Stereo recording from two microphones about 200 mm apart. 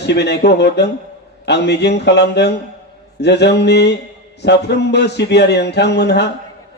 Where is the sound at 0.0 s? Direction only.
60° left (ahead or behind).